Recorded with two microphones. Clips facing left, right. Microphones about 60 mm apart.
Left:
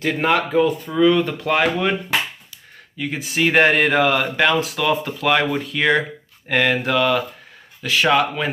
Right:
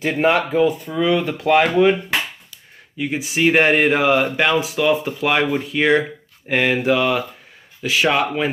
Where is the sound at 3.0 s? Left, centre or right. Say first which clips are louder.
Right 2 dB; centre.